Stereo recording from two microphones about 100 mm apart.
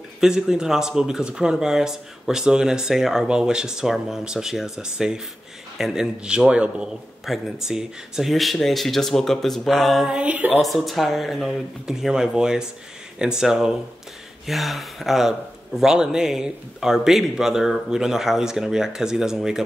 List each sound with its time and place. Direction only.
0.2 s speech: 5° right (ahead or behind)
10.1 s speech: 15° right (ahead or behind)
10.6 s speech: centre (ahead or behind)